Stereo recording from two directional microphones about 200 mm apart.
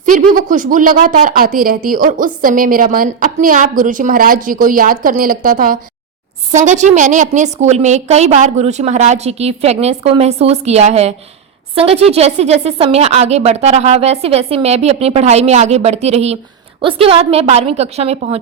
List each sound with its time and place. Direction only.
0.0 s a woman's voice: 40° right (ahead or behind)